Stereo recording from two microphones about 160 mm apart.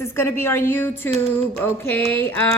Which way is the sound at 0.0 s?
15° left (ahead or behind).